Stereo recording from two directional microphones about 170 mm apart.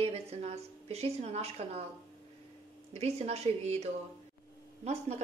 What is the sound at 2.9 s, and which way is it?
A woman's voice, 40° right (ahead or behind).